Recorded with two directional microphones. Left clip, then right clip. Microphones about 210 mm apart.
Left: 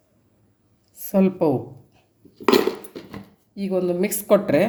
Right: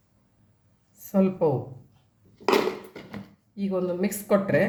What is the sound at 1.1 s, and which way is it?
Speech, 40° left (ahead or behind).